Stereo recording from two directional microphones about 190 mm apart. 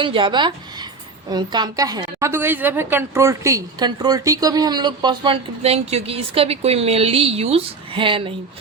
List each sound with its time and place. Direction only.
0.0 s a woman's voice: 25° right (ahead or behind)